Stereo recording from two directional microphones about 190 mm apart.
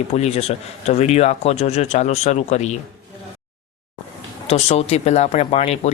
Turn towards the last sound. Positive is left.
turn(degrees=35)  # may be behind; listen again after turning